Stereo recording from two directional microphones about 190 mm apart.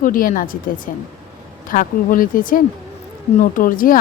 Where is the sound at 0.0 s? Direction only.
45° left (ahead or behind).